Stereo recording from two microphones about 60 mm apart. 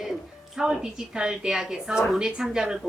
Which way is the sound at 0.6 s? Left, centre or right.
Centre.